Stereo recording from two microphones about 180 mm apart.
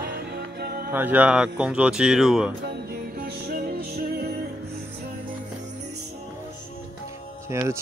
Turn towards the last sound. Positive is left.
turn(degrees=-15)  # may be behind; listen again after turning